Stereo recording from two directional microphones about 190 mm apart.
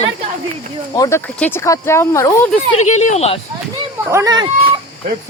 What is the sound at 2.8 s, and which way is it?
Speech, 40° left (ahead or behind).